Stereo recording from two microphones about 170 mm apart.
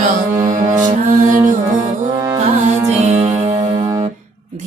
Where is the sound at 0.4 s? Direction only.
45° right (ahead or behind).